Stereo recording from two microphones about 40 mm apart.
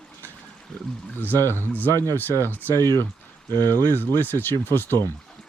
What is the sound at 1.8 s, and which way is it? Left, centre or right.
Speech, left.